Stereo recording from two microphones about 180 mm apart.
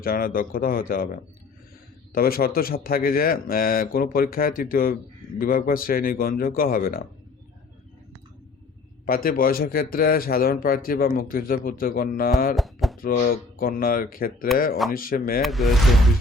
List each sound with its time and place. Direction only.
0.0 s speech: 55° left (ahead or behind)
9.0 s speech: 55° left (ahead or behind)
12.5 s a sound: centre (ahead or behind)
13.0 s speech: 55° left (ahead or behind)
15.4 s speech: centre (ahead or behind)